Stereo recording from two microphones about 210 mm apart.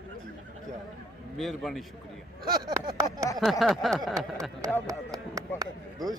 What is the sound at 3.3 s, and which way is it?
A man's voice, centre (ahead or behind).